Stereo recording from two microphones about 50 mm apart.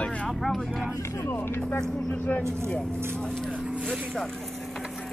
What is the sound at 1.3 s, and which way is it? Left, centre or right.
Speech, left.